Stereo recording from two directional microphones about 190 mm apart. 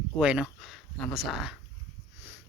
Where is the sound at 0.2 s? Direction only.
5° right (ahead or behind).